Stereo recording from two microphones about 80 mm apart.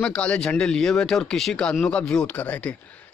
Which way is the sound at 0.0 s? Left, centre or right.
Centre.